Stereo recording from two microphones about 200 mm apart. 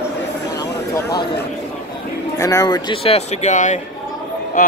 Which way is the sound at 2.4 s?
20° left (ahead or behind).